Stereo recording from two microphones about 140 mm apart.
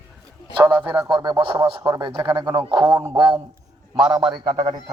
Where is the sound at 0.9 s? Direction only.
25° right (ahead or behind).